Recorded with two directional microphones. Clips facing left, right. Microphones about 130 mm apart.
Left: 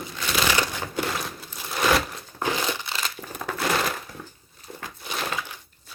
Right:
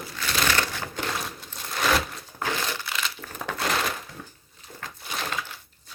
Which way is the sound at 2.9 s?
40° left (ahead or behind).